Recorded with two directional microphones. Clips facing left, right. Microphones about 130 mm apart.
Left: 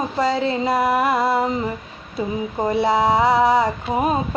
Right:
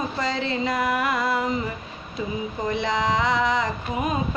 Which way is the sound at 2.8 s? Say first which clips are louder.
Left 6 dB; 30° left (ahead or behind).